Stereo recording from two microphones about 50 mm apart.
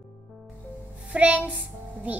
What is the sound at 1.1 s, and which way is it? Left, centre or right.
Music, right.